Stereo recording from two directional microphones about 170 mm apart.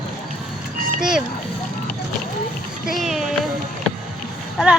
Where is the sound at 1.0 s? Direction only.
5° right (ahead or behind).